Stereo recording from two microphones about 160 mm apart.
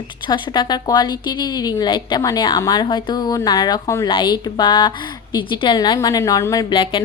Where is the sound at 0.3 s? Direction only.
30° left (ahead or behind).